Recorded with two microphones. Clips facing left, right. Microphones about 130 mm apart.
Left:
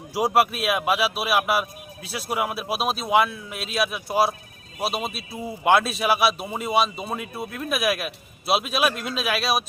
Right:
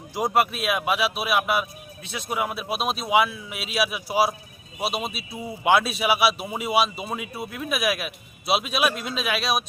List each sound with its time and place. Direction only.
0.1 s a man's voice: 5° left (ahead or behind)